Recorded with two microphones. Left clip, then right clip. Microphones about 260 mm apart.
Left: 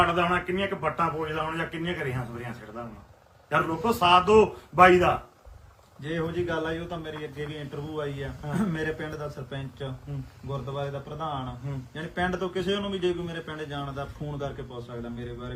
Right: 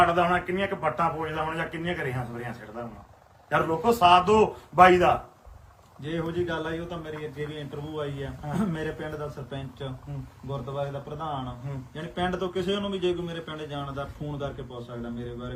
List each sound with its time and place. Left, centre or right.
0.0 s a man's voice: centre